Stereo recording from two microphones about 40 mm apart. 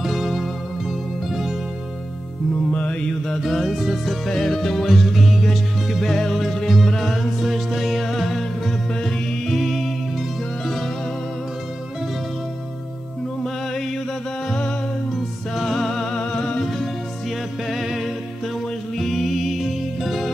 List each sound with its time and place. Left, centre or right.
0.0 s music: centre
2.5 s music: left
3.4 s music: centre
15.1 s music: centre
17.6 s music: centre
18.9 s music: centre